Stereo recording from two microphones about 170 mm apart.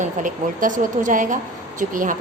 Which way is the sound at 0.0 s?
50° right (ahead or behind).